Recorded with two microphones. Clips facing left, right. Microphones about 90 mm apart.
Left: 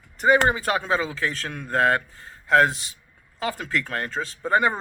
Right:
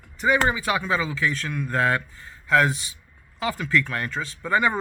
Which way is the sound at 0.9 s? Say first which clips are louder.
Even; 35° left (ahead or behind).